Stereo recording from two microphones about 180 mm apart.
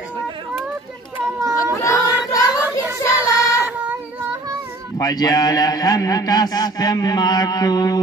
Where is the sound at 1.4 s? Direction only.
20° right (ahead or behind).